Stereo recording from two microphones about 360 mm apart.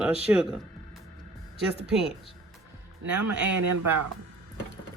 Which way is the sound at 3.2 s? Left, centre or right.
Right.